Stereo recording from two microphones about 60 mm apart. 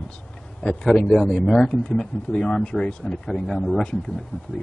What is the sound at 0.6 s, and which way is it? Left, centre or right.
Speech, centre.